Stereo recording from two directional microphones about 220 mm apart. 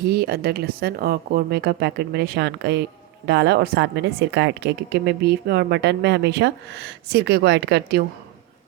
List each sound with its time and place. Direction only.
0.0 s a woman's voice: 45° right (ahead or behind)